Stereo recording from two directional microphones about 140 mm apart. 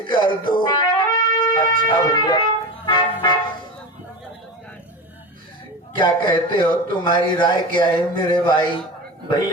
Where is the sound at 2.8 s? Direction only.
30° left (ahead or behind).